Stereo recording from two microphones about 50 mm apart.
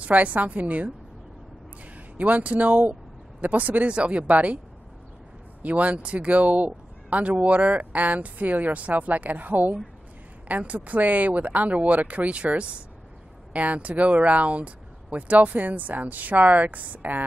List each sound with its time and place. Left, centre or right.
0.0 s speech: right
2.1 s speech: right
5.6 s speech: right